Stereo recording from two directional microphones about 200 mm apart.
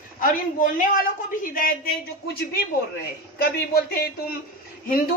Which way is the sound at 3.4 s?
50° left (ahead or behind).